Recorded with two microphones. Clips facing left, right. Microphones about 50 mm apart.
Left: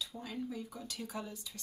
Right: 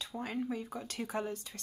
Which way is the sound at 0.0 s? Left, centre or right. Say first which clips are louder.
Right 4 dB; right.